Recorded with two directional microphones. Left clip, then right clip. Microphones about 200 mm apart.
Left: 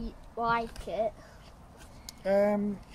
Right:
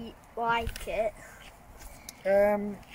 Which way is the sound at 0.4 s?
20° right (ahead or behind).